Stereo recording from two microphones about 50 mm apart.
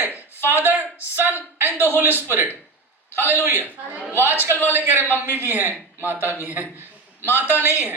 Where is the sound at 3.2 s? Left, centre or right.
Left.